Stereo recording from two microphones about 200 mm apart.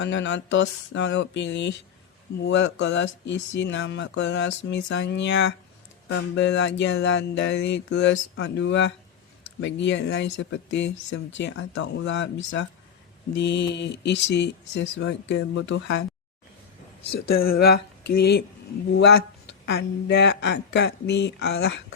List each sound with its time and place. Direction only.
0.0 s speech: 65° left (ahead or behind)
17.2 s speech: 50° left (ahead or behind)